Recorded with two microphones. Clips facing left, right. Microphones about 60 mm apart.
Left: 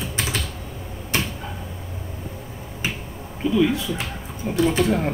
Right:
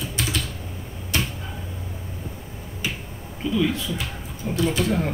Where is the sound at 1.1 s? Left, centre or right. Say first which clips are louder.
Left 1 dB; left.